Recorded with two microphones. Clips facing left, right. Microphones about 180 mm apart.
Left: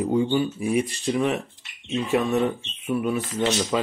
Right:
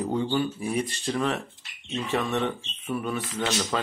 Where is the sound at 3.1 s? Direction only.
35° left (ahead or behind).